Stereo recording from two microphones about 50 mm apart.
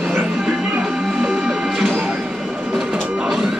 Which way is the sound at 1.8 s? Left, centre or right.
Right.